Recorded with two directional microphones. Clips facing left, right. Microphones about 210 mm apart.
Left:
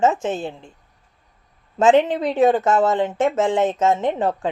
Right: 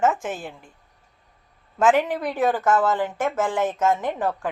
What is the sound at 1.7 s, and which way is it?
Speech, 25° left (ahead or behind).